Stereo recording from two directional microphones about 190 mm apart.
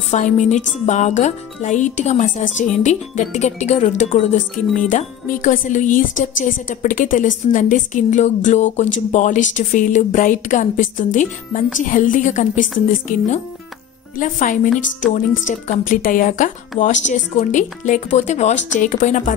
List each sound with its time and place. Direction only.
0.1 s speech: 40° left (ahead or behind)